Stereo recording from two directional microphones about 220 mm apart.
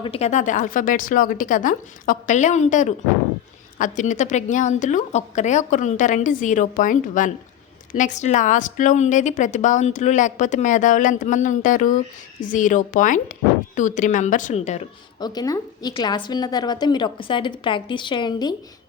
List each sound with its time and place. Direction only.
0.0 s a woman's voice: 25° left (ahead or behind)
15.2 s a woman's voice: 20° left (ahead or behind)